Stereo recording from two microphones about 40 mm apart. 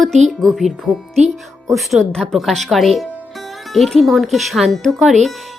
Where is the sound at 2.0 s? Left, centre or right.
Centre.